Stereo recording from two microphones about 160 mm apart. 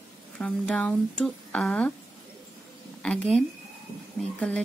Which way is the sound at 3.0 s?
5° left (ahead or behind).